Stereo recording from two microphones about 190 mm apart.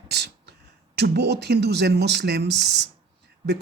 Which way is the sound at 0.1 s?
60° right (ahead or behind).